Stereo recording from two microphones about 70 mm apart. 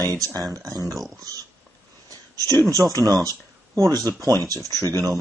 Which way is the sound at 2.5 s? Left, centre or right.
Right.